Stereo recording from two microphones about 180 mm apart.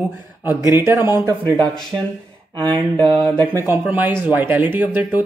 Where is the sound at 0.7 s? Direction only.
15° right (ahead or behind).